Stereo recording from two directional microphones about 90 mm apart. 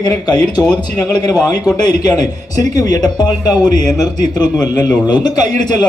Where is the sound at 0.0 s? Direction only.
50° left (ahead or behind).